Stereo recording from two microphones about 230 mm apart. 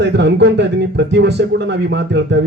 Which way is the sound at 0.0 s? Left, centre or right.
Right.